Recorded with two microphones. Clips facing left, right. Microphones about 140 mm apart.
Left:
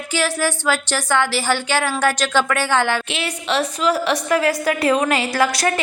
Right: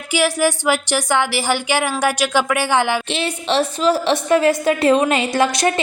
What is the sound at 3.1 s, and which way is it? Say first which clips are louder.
A woman's voice: right 3 dB; 30° right (ahead or behind).